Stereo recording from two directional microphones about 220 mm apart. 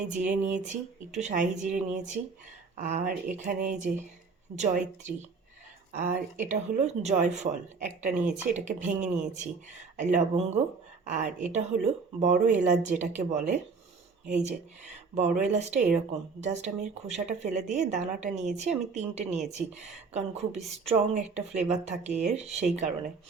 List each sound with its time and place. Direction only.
0.1 s a woman's voice: 35° right (ahead or behind)